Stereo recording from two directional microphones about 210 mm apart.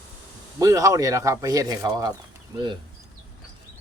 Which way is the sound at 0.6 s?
15° right (ahead or behind).